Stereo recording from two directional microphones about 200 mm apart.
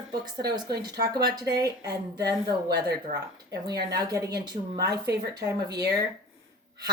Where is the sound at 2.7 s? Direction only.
55° right (ahead or behind).